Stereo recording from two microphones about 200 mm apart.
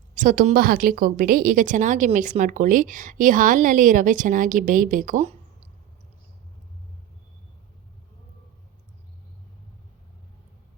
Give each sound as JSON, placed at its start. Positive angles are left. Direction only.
{"t": 0.1, "sound": "a woman's voice", "side_deg": -40}